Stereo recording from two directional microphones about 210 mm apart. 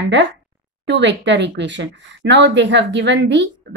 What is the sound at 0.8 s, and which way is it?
Speech, 55° right (ahead or behind).